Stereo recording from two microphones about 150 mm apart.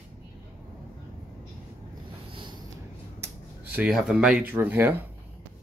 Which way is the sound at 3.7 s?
5° right (ahead or behind).